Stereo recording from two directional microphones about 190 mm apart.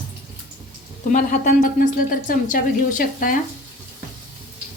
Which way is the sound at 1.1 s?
45° left (ahead or behind).